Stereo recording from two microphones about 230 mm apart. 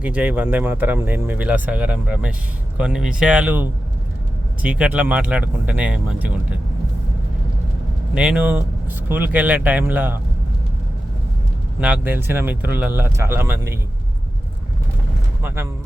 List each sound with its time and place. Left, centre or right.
0.0 s speech: centre
8.1 s speech: centre
11.8 s speech: centre
15.4 s speech: centre